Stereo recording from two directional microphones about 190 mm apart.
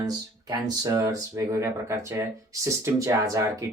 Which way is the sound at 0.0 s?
20° right (ahead or behind).